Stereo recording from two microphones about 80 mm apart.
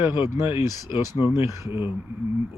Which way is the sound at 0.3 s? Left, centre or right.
Right.